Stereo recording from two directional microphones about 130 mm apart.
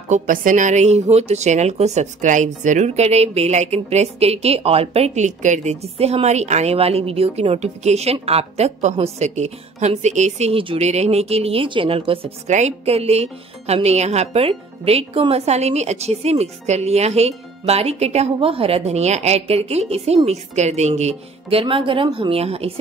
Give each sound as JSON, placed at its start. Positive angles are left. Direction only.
{"t": 0.1, "sound": "speech", "side_deg": -90}
{"t": 10.6, "sound": "speech", "side_deg": -45}
{"t": 10.9, "sound": "speech", "side_deg": -55}
{"t": 12.4, "sound": "speech", "side_deg": -65}